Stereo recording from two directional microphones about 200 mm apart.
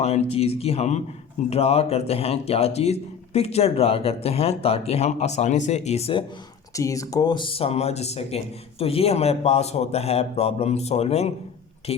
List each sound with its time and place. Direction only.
0.0 s speech: 30° left (ahead or behind)
6.7 s speech: 15° left (ahead or behind)